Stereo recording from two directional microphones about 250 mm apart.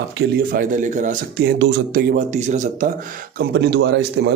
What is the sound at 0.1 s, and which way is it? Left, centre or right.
Speech, right.